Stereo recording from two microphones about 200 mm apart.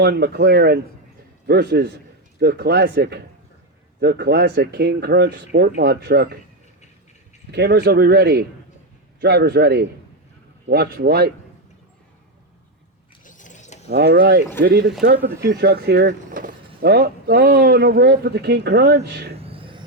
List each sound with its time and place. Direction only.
0.0 s speech: 55° right (ahead or behind)
7.5 s speech: 55° right (ahead or behind)
13.2 s a sound: 40° left (ahead or behind)
13.8 s speech: 55° right (ahead or behind)
16.3 s speech: 40° right (ahead or behind)
19.4 s music: 30° right (ahead or behind)